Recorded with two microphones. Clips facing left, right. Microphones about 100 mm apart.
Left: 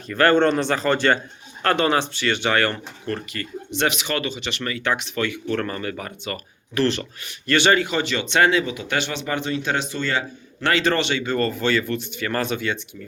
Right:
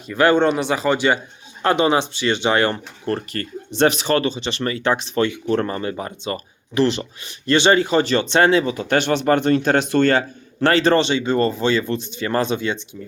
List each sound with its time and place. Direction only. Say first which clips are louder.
0.1 s speech: right 1 dB; 15° right (ahead or behind)
3.1 s speech: right 4 dB; 35° right (ahead or behind)